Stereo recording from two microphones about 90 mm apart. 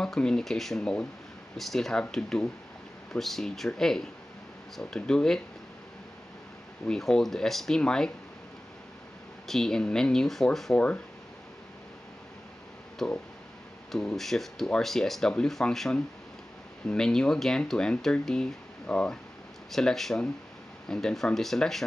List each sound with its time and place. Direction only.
0.0 s speech: 5° left (ahead or behind)
6.9 s speech: 5° left (ahead or behind)
9.5 s speech: 5° left (ahead or behind)
13.0 s speech: 5° left (ahead or behind)